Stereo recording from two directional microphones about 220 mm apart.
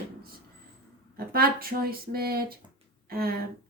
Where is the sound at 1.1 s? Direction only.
40° right (ahead or behind).